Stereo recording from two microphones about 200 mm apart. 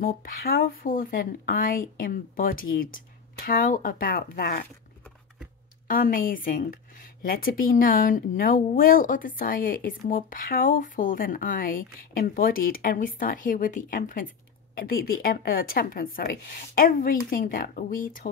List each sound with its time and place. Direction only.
0.0 s a woman's voice: 45° left (ahead or behind)
5.9 s a woman's voice: 45° left (ahead or behind)